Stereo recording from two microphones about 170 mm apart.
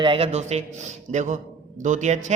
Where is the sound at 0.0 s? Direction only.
30° right (ahead or behind).